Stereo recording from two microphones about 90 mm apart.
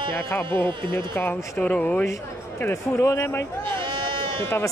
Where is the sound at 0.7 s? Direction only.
65° right (ahead or behind).